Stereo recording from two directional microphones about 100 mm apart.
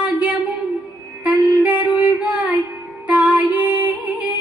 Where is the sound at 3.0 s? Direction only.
15° right (ahead or behind).